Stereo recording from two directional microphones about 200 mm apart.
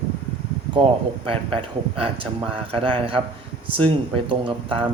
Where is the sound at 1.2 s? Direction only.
25° right (ahead or behind).